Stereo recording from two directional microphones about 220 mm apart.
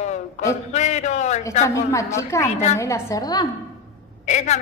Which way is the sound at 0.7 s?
30° left (ahead or behind).